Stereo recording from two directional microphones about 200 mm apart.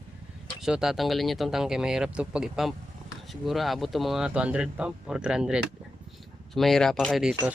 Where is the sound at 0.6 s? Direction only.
Centre (ahead or behind).